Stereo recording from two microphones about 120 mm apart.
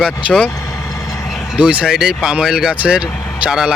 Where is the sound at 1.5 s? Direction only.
10° right (ahead or behind).